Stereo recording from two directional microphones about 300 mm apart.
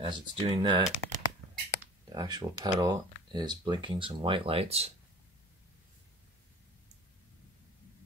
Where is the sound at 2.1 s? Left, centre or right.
Centre.